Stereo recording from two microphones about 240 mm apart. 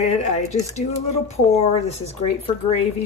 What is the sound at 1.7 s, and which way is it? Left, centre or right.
Speech, left.